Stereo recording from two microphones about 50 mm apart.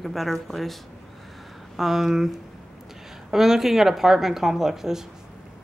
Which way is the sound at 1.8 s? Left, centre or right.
Centre.